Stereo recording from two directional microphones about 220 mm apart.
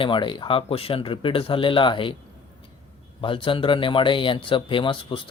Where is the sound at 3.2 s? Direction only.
25° left (ahead or behind).